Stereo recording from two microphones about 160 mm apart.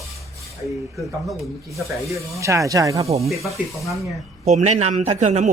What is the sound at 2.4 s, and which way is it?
Speech, 20° right (ahead or behind).